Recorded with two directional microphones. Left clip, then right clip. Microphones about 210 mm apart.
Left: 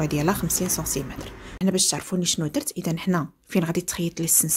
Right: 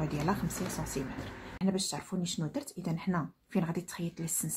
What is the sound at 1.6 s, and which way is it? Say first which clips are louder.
Speech: left 11 dB; 35° left (ahead or behind).